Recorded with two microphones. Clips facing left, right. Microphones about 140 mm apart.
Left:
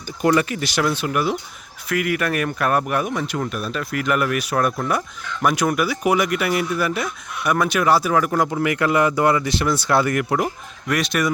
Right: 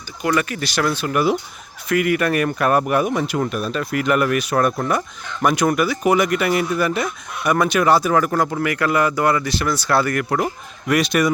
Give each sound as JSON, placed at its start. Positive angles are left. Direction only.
{"t": 0.3, "sound": "speech", "side_deg": 20}
{"t": 1.1, "sound": "speech", "side_deg": -5}
{"t": 8.6, "sound": "speech", "side_deg": 20}
{"t": 10.8, "sound": "speech", "side_deg": 0}